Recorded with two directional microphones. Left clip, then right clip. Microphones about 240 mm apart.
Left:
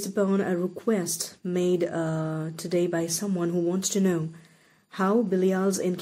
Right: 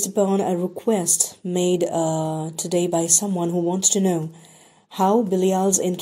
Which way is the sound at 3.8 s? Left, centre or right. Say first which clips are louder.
Right 7 dB; centre.